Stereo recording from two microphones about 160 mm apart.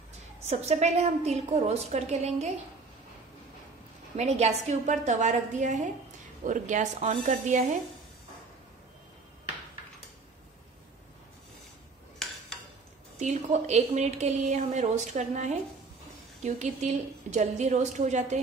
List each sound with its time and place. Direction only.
0.5 s a woman's voice: 45° right (ahead or behind)
4.2 s a woman's voice: 45° right (ahead or behind)
12.2 s a sound: 5° left (ahead or behind)
13.2 s a woman's voice: 45° right (ahead or behind)